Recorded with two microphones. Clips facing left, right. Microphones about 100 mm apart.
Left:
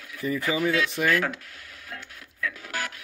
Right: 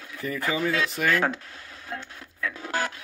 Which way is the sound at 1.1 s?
30° right (ahead or behind).